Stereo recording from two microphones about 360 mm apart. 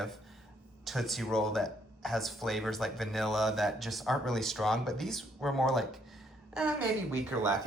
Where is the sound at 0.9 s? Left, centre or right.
Centre.